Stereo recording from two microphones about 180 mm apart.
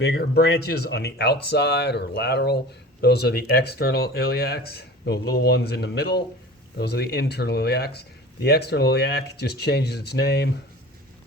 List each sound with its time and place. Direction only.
0.0 s speech: 65° left (ahead or behind)